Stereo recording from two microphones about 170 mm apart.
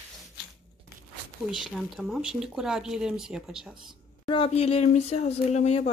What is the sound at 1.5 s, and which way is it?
Speech, centre (ahead or behind).